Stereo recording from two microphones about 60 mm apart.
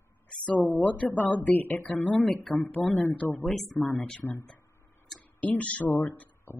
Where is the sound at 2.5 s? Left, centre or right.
Centre.